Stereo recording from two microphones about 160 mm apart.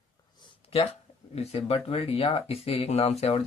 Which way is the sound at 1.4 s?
40° left (ahead or behind).